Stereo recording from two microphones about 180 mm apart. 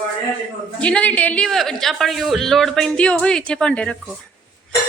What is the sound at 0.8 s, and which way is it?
A man's voice, 5° left (ahead or behind).